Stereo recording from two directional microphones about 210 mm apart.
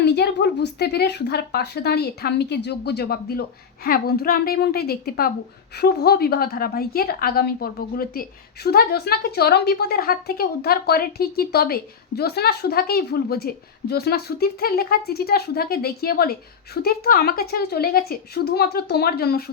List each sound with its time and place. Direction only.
0.0 s a woman's voice: 55° left (ahead or behind)